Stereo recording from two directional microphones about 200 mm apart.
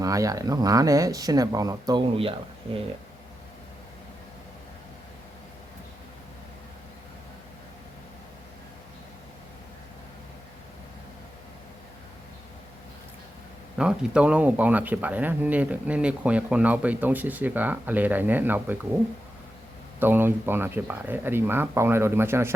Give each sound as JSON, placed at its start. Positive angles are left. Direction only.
{"t": 0.0, "sound": "speech", "side_deg": -15}
{"t": 13.7, "sound": "speech", "side_deg": -5}
{"t": 20.0, "sound": "speech", "side_deg": -10}